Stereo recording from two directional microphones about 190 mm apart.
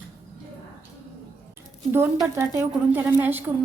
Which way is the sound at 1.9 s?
10° right (ahead or behind).